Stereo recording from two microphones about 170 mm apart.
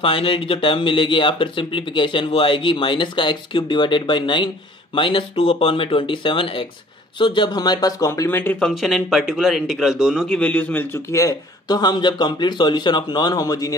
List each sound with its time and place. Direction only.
0.0 s speech: 30° left (ahead or behind)